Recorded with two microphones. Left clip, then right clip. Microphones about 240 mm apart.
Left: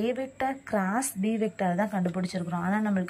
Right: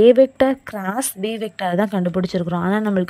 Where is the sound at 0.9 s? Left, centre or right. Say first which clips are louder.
Right 6 dB; right.